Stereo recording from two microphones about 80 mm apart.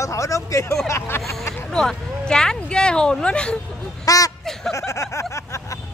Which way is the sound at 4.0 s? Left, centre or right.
Left.